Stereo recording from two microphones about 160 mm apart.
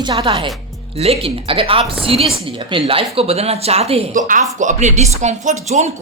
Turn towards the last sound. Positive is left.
turn(degrees=-45)  # may be behind; listen again after turning